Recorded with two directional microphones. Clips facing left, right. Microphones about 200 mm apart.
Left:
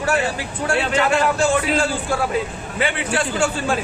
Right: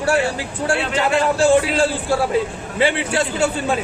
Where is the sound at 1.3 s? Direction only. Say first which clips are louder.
Right 4 dB; 30° right (ahead or behind).